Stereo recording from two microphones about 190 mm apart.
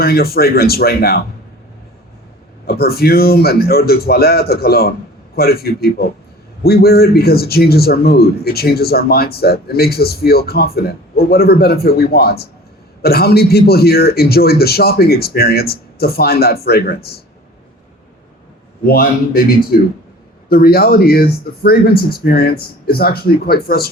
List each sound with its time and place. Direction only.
0.0 s a man's voice: 55° left (ahead or behind)
2.6 s a man's voice: 55° left (ahead or behind)
18.9 s speech: 50° left (ahead or behind)